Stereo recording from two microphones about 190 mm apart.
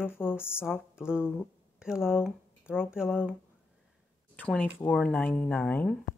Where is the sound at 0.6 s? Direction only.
5° right (ahead or behind).